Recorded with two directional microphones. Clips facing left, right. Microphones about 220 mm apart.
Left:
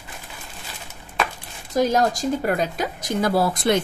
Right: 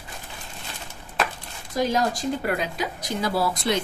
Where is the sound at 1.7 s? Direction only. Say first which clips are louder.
Left 4 dB; 45° left (ahead or behind).